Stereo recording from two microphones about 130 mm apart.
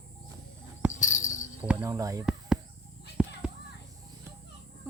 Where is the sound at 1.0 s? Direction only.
70° left (ahead or behind).